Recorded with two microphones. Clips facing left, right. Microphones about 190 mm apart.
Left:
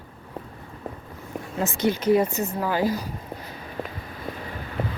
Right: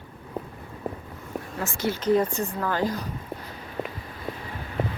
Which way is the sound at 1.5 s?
20° left (ahead or behind).